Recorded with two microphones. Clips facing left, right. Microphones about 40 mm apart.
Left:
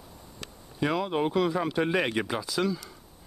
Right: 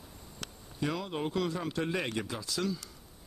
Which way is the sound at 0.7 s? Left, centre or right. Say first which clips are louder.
Left 7 dB; left.